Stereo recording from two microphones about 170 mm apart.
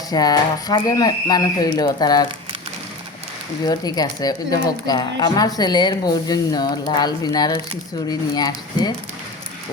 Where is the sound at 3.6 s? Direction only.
25° left (ahead or behind).